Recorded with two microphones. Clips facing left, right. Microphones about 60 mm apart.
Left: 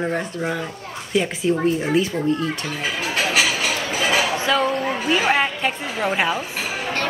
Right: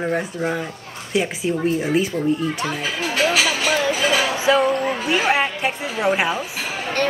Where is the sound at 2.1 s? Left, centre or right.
Left.